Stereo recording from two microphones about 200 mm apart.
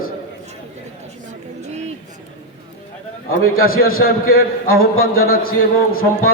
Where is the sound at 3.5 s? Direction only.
45° left (ahead or behind).